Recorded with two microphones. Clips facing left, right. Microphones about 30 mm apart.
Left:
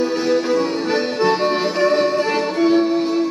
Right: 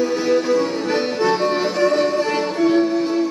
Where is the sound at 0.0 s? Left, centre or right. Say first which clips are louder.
Even; left.